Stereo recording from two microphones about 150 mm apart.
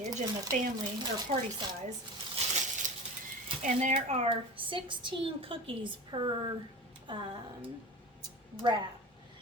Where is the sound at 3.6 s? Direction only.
55° right (ahead or behind); by 7.3 s 35° right (ahead or behind).